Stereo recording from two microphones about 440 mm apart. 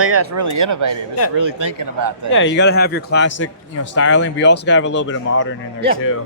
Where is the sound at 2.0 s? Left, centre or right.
Right.